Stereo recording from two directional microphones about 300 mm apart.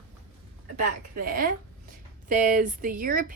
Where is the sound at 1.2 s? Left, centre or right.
Right.